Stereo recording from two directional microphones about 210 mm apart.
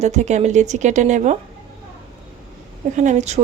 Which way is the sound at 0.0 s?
35° right (ahead or behind).